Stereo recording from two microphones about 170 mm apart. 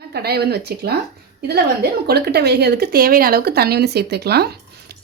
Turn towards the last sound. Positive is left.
turn(degrees=-70)  # may be behind; listen again after turning